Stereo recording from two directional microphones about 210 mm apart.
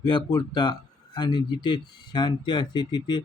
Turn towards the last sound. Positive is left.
turn(degrees=20)  # may be behind; listen again after turning